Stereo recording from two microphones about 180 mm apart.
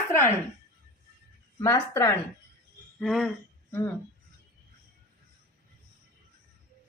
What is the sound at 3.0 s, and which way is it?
Speech, centre (ahead or behind).